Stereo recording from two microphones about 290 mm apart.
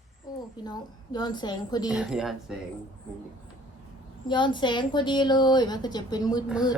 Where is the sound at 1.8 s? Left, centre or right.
Centre.